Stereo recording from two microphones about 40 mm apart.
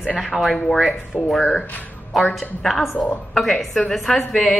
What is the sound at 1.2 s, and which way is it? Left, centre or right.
Speech, right.